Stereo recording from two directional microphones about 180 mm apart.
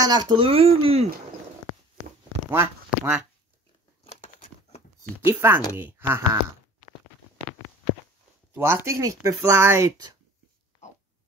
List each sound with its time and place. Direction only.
0.0 s speech: 25° right (ahead or behind)
2.5 s speech: 15° right (ahead or behind)
4.0 s a sound: 35° left (ahead or behind)
5.2 s speech: 10° right (ahead or behind)
8.5 s speech: 15° right (ahead or behind)